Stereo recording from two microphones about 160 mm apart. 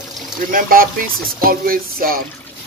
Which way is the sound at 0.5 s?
60° right (ahead or behind).